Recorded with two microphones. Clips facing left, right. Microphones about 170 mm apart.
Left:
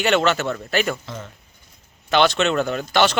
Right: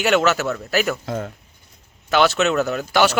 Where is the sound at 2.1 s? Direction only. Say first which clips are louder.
Right 1 dB; 5° right (ahead or behind).